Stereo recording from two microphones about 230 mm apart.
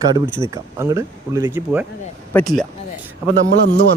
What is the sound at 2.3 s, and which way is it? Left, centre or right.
Speech, centre.